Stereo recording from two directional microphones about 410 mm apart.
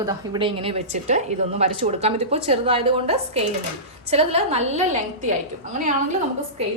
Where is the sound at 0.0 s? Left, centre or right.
Centre.